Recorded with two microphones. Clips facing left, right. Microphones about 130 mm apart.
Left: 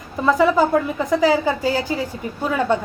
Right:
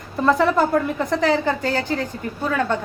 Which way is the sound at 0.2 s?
Centre (ahead or behind).